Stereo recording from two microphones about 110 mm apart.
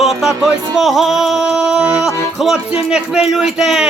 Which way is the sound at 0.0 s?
5° right (ahead or behind).